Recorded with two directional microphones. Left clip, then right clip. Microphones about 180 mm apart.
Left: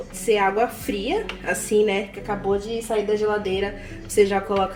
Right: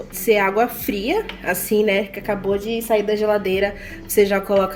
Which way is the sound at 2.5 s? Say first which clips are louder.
Right 6 dB; 50° right (ahead or behind).